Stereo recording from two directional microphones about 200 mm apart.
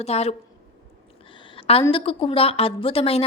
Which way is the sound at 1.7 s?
25° left (ahead or behind).